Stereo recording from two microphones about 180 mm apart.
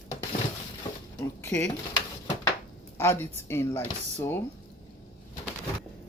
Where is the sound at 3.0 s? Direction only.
10° left (ahead or behind).